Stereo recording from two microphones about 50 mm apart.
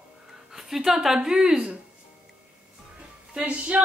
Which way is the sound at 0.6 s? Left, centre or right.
Centre.